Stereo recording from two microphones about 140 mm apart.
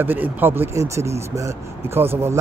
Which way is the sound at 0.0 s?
15° right (ahead or behind).